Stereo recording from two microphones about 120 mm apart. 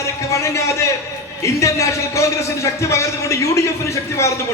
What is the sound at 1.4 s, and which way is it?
A man's voice, 25° left (ahead or behind).